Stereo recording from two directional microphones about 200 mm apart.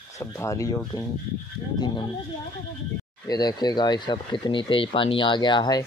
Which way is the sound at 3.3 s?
20° left (ahead or behind).